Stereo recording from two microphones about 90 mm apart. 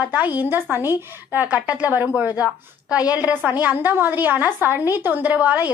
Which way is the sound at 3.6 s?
20° right (ahead or behind).